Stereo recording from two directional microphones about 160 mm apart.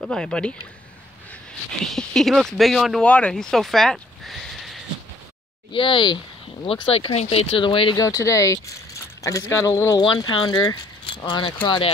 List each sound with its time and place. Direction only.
0.0 s speech: 5° left (ahead or behind)
1.9 s speech: centre (ahead or behind)
5.7 s speech: 30° left (ahead or behind)
8.0 s speech: 20° left (ahead or behind)